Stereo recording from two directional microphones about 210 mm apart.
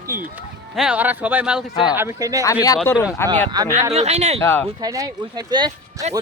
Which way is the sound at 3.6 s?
20° right (ahead or behind).